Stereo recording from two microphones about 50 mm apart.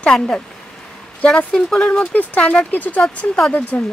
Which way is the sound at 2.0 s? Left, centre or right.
Left.